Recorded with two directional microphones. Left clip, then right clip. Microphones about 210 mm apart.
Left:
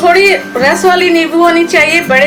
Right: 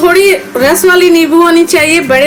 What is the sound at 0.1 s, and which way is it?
A woman's voice, 50° right (ahead or behind).